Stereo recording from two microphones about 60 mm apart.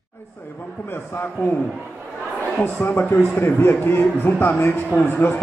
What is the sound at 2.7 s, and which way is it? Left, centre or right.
A man's voice, left.